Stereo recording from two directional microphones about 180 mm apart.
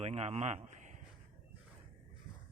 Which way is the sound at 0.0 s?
35° right (ahead or behind).